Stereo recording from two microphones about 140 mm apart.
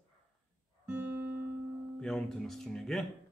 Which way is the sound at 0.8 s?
15° right (ahead or behind).